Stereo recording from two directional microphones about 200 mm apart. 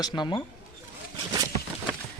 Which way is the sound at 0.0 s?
20° left (ahead or behind).